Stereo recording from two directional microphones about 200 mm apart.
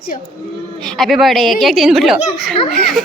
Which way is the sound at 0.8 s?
Centre (ahead or behind).